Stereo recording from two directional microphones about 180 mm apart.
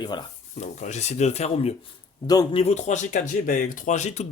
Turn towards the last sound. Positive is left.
turn(degrees=40)  # may be behind; listen again after turning